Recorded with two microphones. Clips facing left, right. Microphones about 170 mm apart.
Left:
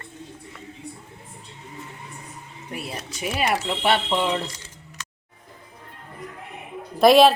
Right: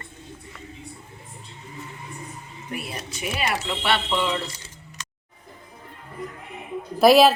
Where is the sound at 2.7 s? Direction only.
35° left (ahead or behind).